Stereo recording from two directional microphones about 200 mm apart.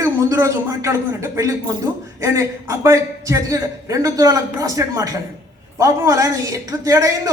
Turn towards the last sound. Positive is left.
turn(degrees=-15)  # may be behind; listen again after turning